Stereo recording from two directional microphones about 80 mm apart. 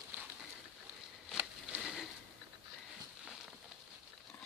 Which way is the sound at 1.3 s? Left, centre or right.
Centre.